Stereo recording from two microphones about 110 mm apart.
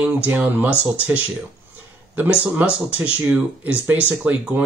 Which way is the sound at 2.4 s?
15° right (ahead or behind).